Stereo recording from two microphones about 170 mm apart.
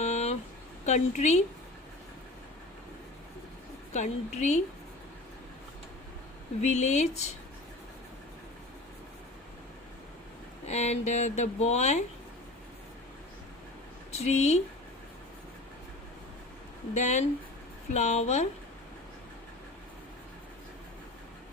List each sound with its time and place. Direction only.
0.0 s a sound: 40° left (ahead or behind)
0.9 s a woman's voice: 45° left (ahead or behind)
3.9 s a woman's voice: 45° left (ahead or behind)
6.6 s a woman's voice: 45° left (ahead or behind)
10.7 s speech: 40° left (ahead or behind)
14.1 s speech: 40° left (ahead or behind)
16.9 s a woman's voice: 45° left (ahead or behind)